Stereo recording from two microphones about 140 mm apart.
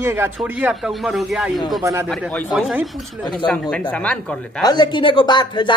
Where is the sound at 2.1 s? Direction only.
10° left (ahead or behind).